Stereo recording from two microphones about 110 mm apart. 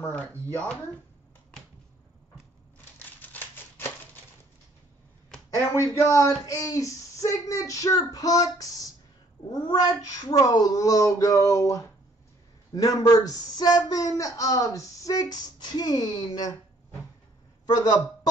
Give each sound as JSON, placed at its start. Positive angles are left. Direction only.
{"t": 0.0, "sound": "speech", "side_deg": 15}
{"t": 3.2, "sound": "typewriter", "side_deg": 15}
{"t": 5.6, "sound": "speech", "side_deg": 25}
{"t": 17.6, "sound": "a man's voice", "side_deg": 40}